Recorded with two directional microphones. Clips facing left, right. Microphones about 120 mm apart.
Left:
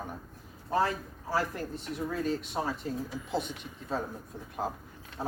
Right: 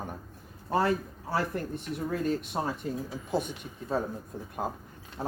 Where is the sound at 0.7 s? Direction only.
65° right (ahead or behind).